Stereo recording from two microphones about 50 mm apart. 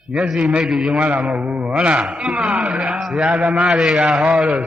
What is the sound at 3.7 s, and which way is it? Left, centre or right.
Mantra, centre.